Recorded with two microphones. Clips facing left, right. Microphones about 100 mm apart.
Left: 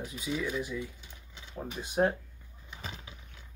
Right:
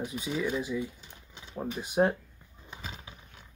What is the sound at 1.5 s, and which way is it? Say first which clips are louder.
Speech: right 3 dB; 10° right (ahead or behind).